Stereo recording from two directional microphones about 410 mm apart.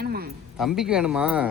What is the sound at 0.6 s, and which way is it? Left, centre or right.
Speech, centre.